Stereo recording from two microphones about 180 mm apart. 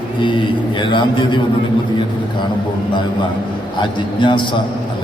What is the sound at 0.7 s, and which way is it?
Speech, 25° left (ahead or behind).